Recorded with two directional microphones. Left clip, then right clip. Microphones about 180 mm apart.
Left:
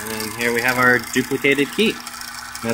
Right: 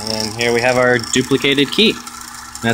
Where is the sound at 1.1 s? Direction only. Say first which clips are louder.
Right 3 dB; 55° right (ahead or behind).